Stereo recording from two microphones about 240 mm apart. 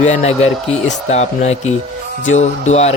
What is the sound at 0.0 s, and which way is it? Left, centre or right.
Speech, left.